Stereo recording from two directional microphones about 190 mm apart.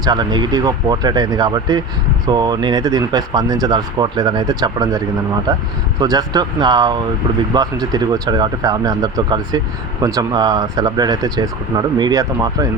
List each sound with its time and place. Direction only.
0.0 s speech: 20° right (ahead or behind)